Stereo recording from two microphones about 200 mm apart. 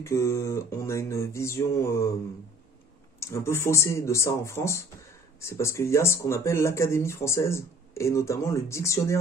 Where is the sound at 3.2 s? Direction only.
15° left (ahead or behind).